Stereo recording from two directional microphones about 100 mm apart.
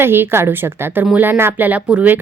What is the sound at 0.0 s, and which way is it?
Speech, 20° right (ahead or behind).